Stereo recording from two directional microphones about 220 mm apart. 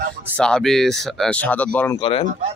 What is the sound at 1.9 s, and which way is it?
Speech, 20° left (ahead or behind).